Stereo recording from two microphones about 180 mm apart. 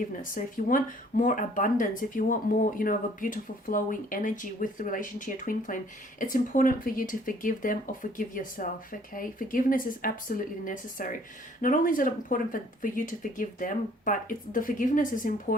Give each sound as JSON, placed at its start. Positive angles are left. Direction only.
{"t": 0.2, "sound": "speech", "side_deg": 50}